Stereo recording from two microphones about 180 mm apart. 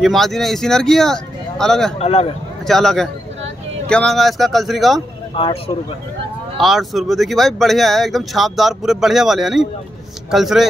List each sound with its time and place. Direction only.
0.0 s speech: centre (ahead or behind)
2.0 s speech: 35° left (ahead or behind)
2.6 s speech: centre (ahead or behind)
5.3 s speech: 30° left (ahead or behind)
6.6 s speech: centre (ahead or behind)